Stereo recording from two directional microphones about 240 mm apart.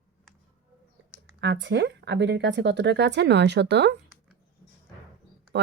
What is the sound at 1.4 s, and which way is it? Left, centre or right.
A woman's voice, right.